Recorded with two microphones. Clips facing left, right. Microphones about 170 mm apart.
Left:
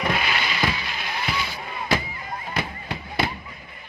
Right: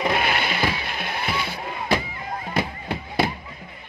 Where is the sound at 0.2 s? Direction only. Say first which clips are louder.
Right 2 dB; 55° right (ahead or behind).